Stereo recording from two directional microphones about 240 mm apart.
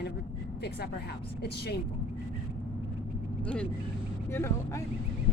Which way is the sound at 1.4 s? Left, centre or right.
Left.